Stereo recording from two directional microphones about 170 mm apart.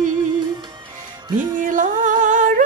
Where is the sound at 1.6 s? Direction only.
50° right (ahead or behind).